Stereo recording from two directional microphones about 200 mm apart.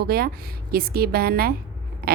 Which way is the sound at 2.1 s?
50° right (ahead or behind).